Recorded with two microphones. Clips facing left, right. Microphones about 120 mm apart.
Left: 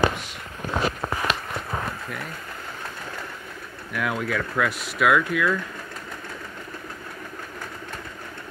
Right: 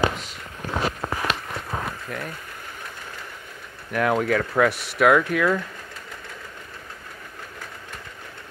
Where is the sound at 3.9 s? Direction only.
45° right (ahead or behind).